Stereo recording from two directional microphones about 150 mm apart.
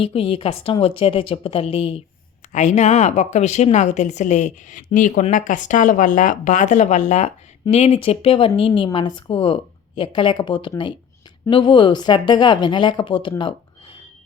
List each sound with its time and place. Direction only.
0.0 s a woman's voice: 40° left (ahead or behind)
2.5 s speech: 50° left (ahead or behind)
7.6 s a woman's voice: 40° left (ahead or behind)